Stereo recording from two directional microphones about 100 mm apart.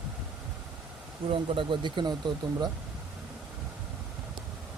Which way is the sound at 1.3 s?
55° right (ahead or behind).